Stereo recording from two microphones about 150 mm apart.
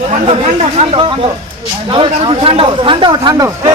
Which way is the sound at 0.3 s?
45° right (ahead or behind).